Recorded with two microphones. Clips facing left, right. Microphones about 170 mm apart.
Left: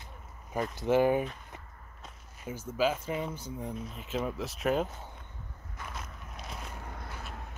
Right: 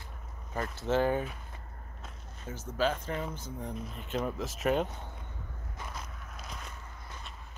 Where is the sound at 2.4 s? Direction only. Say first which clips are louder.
Left 1 dB; 10° left (ahead or behind).